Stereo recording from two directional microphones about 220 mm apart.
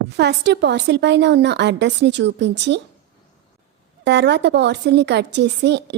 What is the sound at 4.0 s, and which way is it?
A woman's voice, 50° right (ahead or behind).